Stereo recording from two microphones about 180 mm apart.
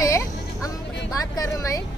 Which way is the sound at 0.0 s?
20° left (ahead or behind).